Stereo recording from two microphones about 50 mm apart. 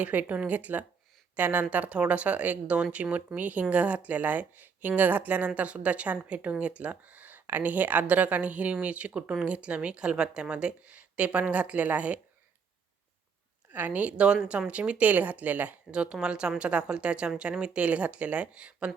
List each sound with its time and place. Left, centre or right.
0.0 s speech: right
1.7 s speech: right
13.7 s speech: right
15.9 s speech: centre